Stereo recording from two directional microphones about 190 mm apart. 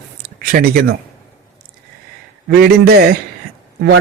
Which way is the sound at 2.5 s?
55° right (ahead or behind).